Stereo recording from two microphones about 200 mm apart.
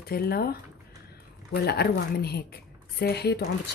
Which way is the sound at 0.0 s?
50° left (ahead or behind).